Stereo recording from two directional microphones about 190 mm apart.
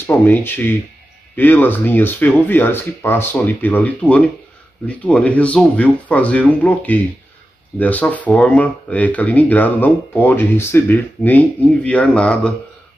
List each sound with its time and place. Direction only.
0.0 s speech: 10° left (ahead or behind)